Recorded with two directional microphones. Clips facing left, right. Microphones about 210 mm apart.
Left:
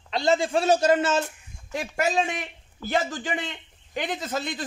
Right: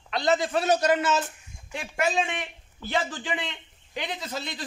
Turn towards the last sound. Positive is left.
turn(degrees=50)  # may be behind; listen again after turning